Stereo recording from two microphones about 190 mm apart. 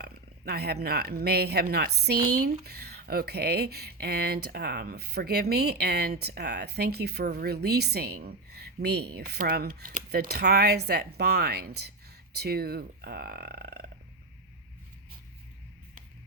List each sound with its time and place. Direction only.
0.0 s speech: 55° right (ahead or behind)